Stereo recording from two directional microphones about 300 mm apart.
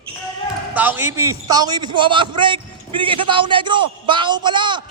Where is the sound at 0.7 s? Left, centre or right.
Centre.